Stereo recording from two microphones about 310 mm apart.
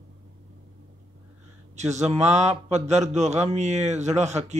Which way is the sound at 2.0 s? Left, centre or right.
Right.